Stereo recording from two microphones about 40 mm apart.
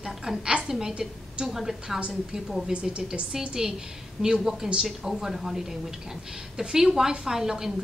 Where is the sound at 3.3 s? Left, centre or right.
Centre.